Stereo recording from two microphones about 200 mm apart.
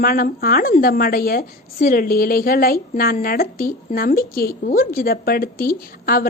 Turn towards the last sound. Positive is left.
turn(degrees=45)  # may be behind; listen again after turning